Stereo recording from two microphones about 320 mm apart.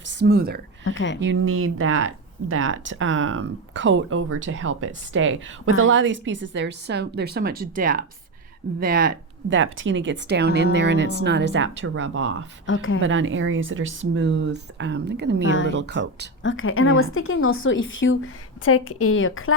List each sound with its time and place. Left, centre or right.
0.0 s speech: right
0.9 s speech: left
1.2 s speech: right
12.6 s speech: left
13.0 s speech: right
15.4 s speech: left
15.7 s speech: right
16.4 s speech: left